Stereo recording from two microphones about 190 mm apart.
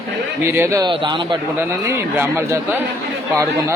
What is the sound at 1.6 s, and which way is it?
Speech, 10° right (ahead or behind).